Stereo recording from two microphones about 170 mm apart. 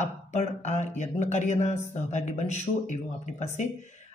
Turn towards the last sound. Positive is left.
turn(degrees=45)  # may be behind; listen again after turning